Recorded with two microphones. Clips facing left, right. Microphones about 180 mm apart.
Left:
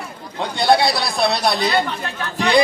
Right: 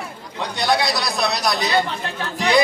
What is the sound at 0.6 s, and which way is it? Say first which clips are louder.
Speech: left 5 dB; 30° left (ahead or behind).